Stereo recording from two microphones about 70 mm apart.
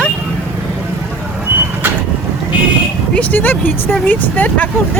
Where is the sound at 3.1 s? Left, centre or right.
Left.